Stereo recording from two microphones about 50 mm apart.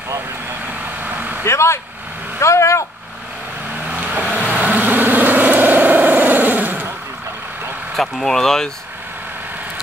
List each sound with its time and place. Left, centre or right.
1.0 s vehicle: right
1.4 s speech: left
2.4 s speech: left
3.8 s vehicle: right
7.9 s speech: centre